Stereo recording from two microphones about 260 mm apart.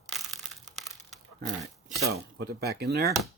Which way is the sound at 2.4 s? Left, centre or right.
Right.